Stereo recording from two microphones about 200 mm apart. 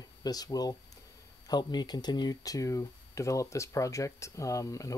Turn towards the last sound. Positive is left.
turn(degrees=15)  # may be behind; listen again after turning